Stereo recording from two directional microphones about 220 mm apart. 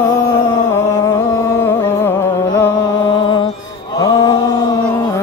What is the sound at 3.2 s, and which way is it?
Music, 20° left (ahead or behind).